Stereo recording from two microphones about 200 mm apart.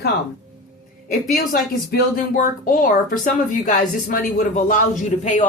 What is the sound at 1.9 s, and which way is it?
Speech, 40° left (ahead or behind).